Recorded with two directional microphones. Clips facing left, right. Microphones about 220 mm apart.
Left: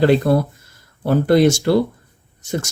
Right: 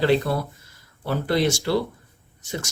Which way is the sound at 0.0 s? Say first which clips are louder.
Left 6 dB; 45° left (ahead or behind).